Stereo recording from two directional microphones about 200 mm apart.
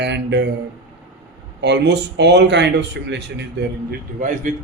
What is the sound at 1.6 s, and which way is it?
Speech, 60° right (ahead or behind).